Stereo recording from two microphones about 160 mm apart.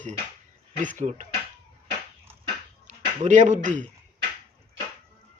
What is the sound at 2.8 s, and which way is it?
Speech, 50° right (ahead or behind).